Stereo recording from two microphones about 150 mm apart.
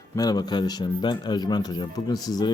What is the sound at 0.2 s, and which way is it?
A man's voice, 25° left (ahead or behind).